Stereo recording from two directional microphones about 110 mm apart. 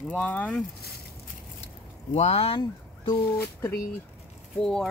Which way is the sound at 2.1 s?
75° left (ahead or behind).